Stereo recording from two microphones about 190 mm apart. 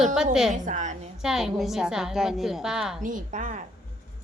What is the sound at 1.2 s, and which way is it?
A woman's voice, centre (ahead or behind).